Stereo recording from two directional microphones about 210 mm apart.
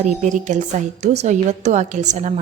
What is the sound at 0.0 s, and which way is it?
A woman's voice, 35° right (ahead or behind).